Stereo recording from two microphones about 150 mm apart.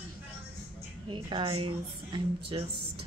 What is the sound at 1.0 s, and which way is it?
A woman's voice, 35° right (ahead or behind).